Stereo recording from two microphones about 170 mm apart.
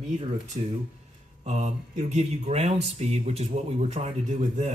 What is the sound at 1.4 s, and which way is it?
Speech, 45° right (ahead or behind).